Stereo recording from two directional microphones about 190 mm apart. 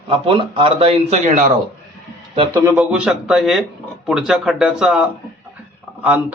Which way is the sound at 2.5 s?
10° right (ahead or behind).